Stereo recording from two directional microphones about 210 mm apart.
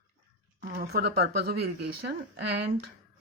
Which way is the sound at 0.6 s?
45° right (ahead or behind).